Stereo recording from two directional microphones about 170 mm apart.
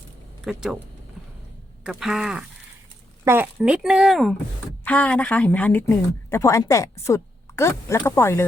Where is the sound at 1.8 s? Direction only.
5° right (ahead or behind).